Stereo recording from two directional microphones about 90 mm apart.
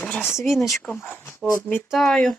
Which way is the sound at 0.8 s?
20° left (ahead or behind).